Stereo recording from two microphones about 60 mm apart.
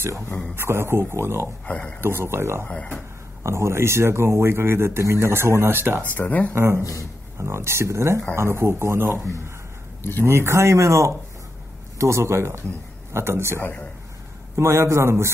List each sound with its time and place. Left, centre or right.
0.6 s speech: right
1.7 s speech: left
2.0 s speech: right
2.7 s speech: centre
3.4 s speech: right
5.3 s speech: right
6.0 s speech: left
6.5 s speech: right
6.8 s a man's voice: left
7.3 s speech: right
10.2 s speech: right